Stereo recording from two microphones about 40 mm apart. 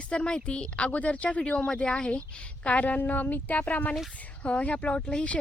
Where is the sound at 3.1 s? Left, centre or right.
Left.